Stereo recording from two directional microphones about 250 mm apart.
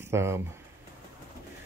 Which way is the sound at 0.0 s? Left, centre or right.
Centre.